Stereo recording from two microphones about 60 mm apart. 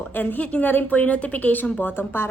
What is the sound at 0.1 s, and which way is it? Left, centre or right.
A woman's voice, left.